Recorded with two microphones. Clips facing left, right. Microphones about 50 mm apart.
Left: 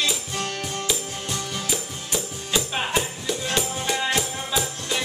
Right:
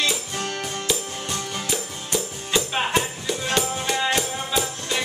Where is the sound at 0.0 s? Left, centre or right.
Centre.